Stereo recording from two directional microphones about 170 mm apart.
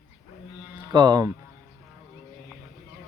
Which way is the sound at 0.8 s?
25° right (ahead or behind).